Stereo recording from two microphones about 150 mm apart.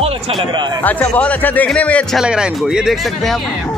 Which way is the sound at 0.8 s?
10° left (ahead or behind).